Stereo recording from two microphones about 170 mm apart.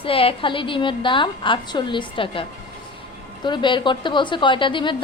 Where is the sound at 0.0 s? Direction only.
35° left (ahead or behind).